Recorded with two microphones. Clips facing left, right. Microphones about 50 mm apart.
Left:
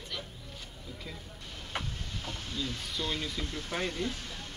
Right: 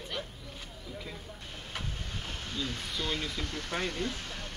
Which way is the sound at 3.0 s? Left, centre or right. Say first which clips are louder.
Even; right.